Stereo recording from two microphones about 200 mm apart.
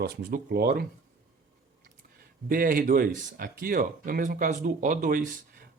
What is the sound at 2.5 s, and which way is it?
Speech, 45° right (ahead or behind).